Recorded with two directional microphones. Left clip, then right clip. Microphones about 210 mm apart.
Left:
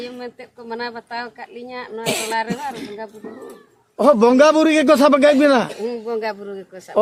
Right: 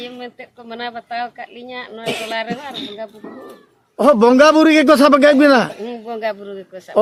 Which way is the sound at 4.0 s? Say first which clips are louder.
Right 2 dB; 20° right (ahead or behind).